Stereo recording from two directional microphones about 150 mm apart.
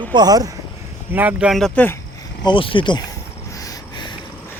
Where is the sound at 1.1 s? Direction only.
10° right (ahead or behind).